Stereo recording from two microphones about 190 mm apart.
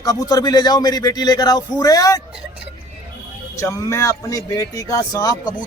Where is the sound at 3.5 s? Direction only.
15° left (ahead or behind).